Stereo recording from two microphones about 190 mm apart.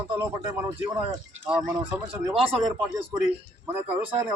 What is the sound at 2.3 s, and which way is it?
Speech, 30° right (ahead or behind).